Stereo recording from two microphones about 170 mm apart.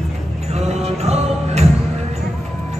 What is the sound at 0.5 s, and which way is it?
Music, 40° right (ahead or behind).